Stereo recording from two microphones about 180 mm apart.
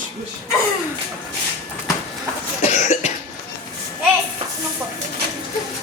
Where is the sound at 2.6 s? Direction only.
40° left (ahead or behind).